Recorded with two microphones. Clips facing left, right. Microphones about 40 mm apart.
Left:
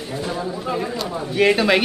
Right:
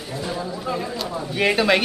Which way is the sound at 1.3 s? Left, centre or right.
Centre.